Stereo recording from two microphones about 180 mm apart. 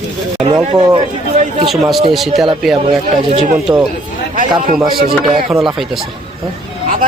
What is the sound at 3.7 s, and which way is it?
Speech, 20° right (ahead or behind).